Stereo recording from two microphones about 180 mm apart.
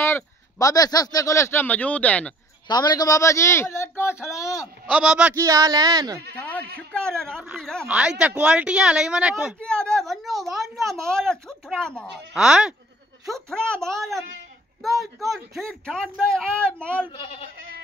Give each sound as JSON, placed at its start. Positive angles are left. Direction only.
{"t": 0.0, "sound": "speech", "side_deg": 15}
{"t": 2.7, "sound": "speech", "side_deg": 25}
{"t": 4.8, "sound": "a man's voice", "side_deg": -5}
{"t": 5.3, "sound": "a man's voice", "side_deg": -20}
{"t": 6.9, "sound": "speech", "side_deg": 5}
{"t": 7.8, "sound": "speech", "side_deg": -5}
{"t": 17.1, "sound": "speech", "side_deg": 30}